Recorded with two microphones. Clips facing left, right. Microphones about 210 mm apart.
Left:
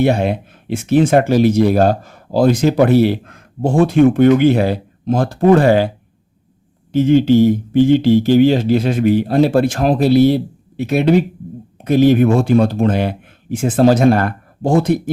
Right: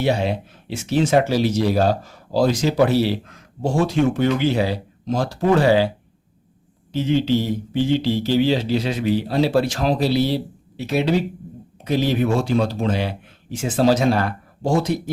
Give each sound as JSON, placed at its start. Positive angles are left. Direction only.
{"t": 0.0, "sound": "speech", "side_deg": 55}
{"t": 6.9, "sound": "speech", "side_deg": 50}